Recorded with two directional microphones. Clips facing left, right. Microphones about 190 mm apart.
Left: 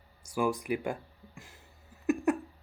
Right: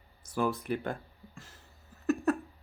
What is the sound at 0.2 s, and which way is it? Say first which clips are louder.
Speech: left 1 dB; 10° left (ahead or behind).